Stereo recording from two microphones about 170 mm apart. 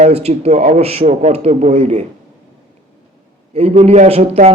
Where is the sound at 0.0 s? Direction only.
40° right (ahead or behind).